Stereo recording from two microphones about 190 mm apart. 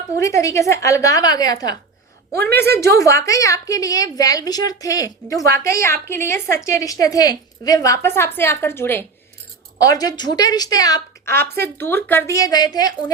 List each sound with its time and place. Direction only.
0.2 s a woman's voice: 15° left (ahead or behind)